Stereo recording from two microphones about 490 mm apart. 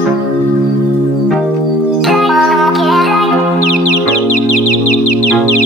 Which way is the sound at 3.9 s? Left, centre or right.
Left.